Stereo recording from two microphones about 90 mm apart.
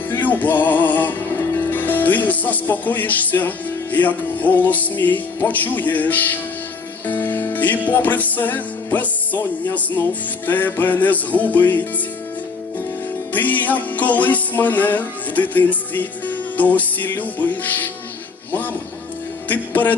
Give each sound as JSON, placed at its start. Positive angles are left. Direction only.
{"t": 0.1, "sound": "music", "side_deg": 20}
{"t": 13.3, "sound": "music", "side_deg": 20}
{"t": 19.5, "sound": "music", "side_deg": 20}